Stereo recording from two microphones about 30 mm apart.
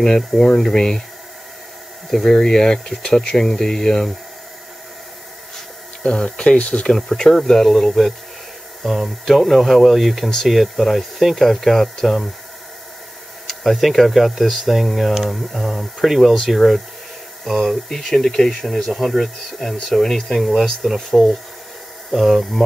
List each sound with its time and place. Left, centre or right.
0.6 s speech: centre
2.0 s speech: centre
2.3 s speech: left
6.0 s speech: left
7.2 s speech: centre
8.8 s speech: centre
13.5 s speech: centre
16.3 s speech: centre
17.8 s speech: centre
20.1 s speech: centre
20.3 s speech: centre